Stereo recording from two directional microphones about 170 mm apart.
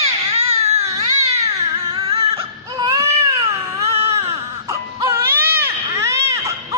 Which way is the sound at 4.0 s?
15° right (ahead or behind).